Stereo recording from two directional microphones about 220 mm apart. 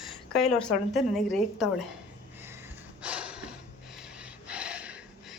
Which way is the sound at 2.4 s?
10° right (ahead or behind).